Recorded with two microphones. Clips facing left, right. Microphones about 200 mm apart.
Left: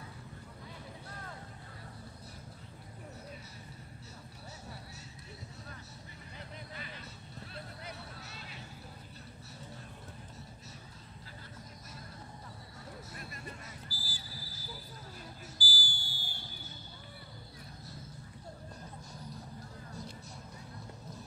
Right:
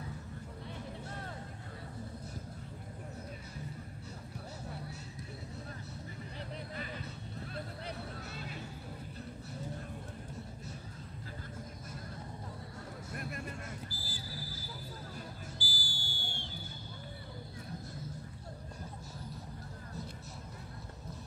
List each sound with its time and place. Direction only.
13.1 s music: 55° right (ahead or behind)
13.8 s a sound: 25° right (ahead or behind)
15.5 s fire alarm: 25° right (ahead or behind)